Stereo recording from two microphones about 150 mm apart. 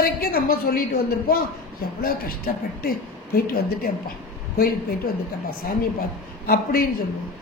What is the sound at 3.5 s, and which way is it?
Speech, 90° left.